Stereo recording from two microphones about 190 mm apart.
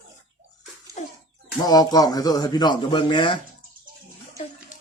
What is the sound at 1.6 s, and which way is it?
Speech, 20° left (ahead or behind).